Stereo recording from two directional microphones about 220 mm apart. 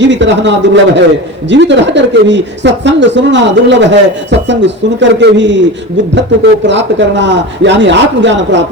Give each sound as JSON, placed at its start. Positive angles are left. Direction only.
{"t": 0.0, "sound": "a man's voice", "side_deg": -55}